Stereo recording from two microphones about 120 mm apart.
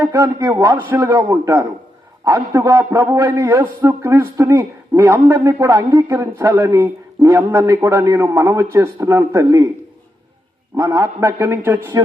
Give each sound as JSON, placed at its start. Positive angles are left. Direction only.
{"t": 0.0, "sound": "a man's voice", "side_deg": -30}
{"t": 10.8, "sound": "a man's voice", "side_deg": -25}